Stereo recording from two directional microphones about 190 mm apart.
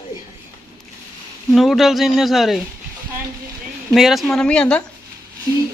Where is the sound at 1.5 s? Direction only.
Centre (ahead or behind).